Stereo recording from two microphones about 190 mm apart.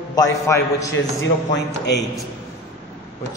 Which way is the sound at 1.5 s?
65° left (ahead or behind).